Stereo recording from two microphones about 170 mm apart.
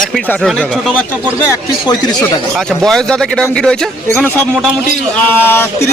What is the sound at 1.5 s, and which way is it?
Speech, 25° left (ahead or behind).